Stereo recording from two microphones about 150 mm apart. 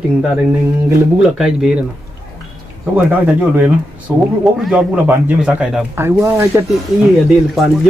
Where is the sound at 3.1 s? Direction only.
10° right (ahead or behind).